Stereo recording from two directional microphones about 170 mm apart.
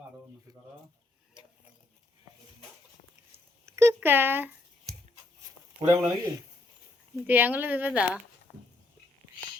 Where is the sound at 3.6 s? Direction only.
15° right (ahead or behind).